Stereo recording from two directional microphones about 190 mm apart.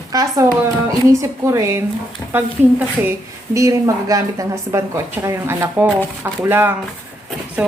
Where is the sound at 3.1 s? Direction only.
15° right (ahead or behind).